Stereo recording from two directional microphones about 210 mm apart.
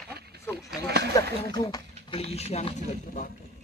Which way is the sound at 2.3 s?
30° left (ahead or behind).